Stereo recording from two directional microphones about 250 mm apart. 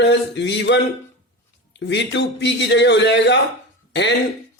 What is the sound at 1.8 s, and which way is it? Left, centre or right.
Speech, left.